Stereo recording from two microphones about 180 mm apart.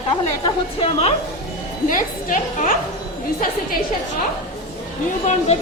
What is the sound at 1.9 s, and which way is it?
Speech, 50° left (ahead or behind).